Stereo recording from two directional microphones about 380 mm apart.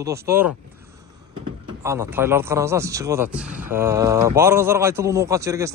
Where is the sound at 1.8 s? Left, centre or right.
Centre.